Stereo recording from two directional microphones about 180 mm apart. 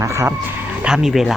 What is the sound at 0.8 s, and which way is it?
Speech, 5° right (ahead or behind).